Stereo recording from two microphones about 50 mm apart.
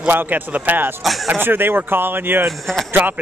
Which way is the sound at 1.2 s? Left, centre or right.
Right.